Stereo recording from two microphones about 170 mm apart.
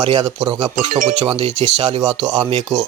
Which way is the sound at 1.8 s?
25° right (ahead or behind).